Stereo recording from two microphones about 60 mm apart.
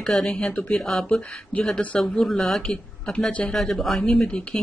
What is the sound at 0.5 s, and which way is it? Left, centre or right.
Speech, left.